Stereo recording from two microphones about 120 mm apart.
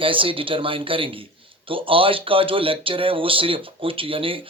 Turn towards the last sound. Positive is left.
turn(degrees=-50)  # may be behind; listen again after turning